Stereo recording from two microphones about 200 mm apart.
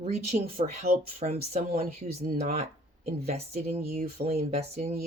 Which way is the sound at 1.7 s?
50° right (ahead or behind).